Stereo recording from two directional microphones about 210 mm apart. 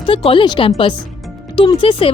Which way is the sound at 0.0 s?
25° left (ahead or behind).